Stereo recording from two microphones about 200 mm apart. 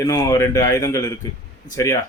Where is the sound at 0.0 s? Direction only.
15° left (ahead or behind).